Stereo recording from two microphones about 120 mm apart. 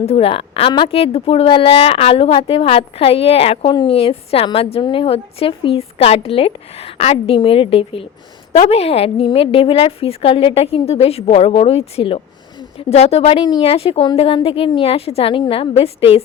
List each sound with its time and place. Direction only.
0.0 s speech: 55° left (ahead or behind)
8.5 s a woman's voice: 70° left (ahead or behind)
13.4 s speech: 45° left (ahead or behind)